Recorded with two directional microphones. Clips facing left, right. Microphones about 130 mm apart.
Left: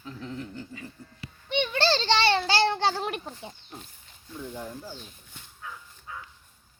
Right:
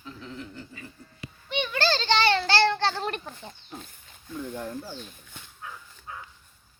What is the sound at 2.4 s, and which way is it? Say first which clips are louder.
Child singing: right 1 dB; 15° left (ahead or behind).